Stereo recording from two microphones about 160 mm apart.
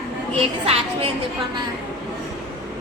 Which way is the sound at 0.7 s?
40° right (ahead or behind).